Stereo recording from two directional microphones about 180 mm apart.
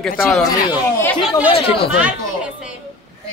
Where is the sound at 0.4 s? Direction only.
20° left (ahead or behind).